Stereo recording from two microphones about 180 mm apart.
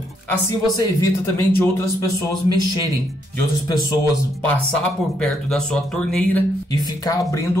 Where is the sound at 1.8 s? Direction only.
20° left (ahead or behind).